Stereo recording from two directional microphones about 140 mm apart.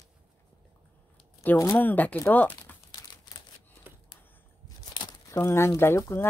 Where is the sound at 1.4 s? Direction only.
20° left (ahead or behind).